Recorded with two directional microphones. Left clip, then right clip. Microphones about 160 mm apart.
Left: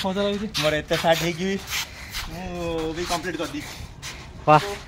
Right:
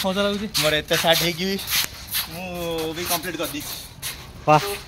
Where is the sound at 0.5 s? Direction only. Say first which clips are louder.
Right 3 dB; 5° right (ahead or behind).